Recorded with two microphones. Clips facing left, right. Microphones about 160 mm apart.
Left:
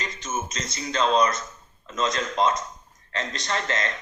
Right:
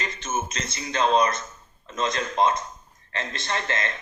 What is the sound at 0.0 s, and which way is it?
Music, 55° right (ahead or behind).